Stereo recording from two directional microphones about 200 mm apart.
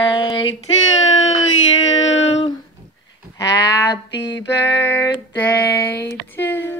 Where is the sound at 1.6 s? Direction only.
75° left (ahead or behind).